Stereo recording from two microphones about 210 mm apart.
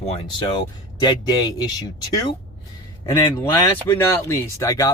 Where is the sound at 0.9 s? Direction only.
20° left (ahead or behind).